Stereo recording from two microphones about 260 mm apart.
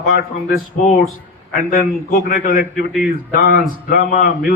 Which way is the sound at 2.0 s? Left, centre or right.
Left.